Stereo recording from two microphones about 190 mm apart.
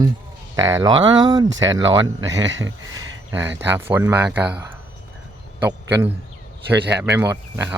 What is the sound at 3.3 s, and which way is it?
Speech, 10° right (ahead or behind).